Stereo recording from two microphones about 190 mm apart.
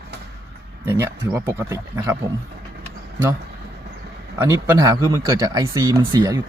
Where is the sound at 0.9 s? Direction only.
10° right (ahead or behind).